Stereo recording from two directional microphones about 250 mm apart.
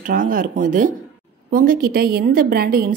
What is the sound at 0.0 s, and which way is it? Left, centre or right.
A woman's voice, right.